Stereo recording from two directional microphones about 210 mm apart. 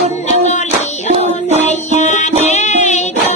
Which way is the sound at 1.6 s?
35° left (ahead or behind).